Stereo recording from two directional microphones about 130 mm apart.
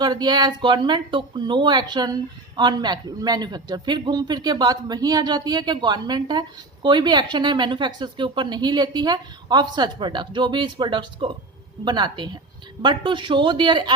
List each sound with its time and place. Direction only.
0.0 s a woman's voice: 30° right (ahead or behind)